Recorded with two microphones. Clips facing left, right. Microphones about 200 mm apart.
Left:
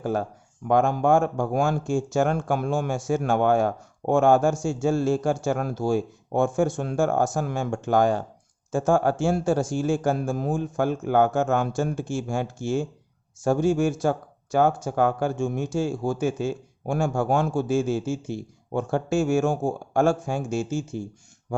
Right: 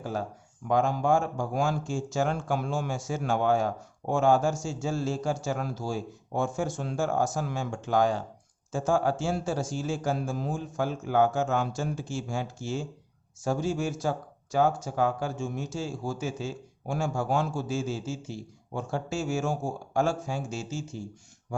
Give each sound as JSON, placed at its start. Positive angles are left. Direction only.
{"t": 0.0, "sound": "speech", "side_deg": 55}